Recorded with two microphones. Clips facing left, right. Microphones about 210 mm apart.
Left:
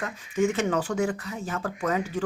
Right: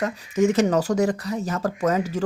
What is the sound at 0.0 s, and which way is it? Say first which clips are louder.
Speech: right 5 dB; 40° right (ahead or behind).